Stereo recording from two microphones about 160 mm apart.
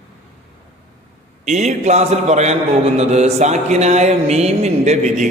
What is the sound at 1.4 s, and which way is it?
Mantra, 45° right (ahead or behind).